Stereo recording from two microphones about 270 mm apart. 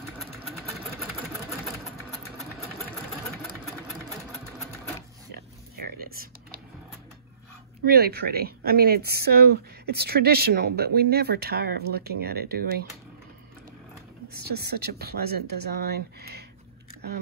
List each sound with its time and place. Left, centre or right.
0.2 s sewing machine: centre
2.8 s engine: centre
5.3 s a sound: right
7.8 s a woman's voice: right
14.5 s a woman's voice: right